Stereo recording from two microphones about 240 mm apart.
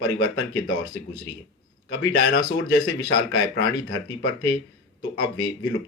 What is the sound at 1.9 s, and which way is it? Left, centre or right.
Speech, left.